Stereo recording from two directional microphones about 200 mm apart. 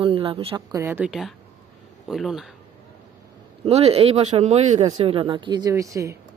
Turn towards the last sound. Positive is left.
turn(degrees=-15)  # may be behind; listen again after turning